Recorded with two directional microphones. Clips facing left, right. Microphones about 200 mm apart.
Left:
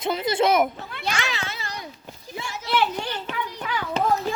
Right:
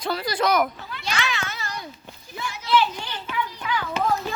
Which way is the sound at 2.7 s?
55° left (ahead or behind).